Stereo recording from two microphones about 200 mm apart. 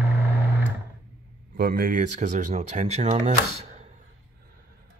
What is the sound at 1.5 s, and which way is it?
Speech, 50° right (ahead or behind).